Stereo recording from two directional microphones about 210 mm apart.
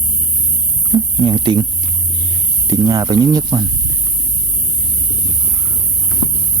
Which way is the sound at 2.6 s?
15° right (ahead or behind).